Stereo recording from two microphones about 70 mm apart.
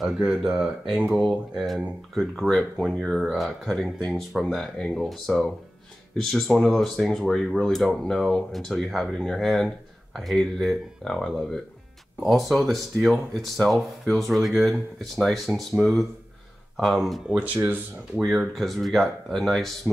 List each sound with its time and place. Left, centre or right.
0.0 s speech: centre
17.3 s speech: right
18.1 s speech: centre